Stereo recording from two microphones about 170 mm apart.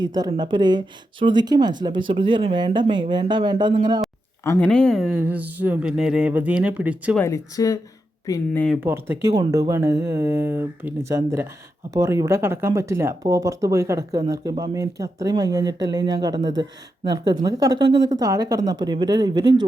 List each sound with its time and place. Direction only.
0.0 s speech: 25° right (ahead or behind)
4.4 s speech: 5° left (ahead or behind); by 7.2 s 10° right (ahead or behind)
7.2 s speech: 15° left (ahead or behind)
8.7 s speech: 10° right (ahead or behind)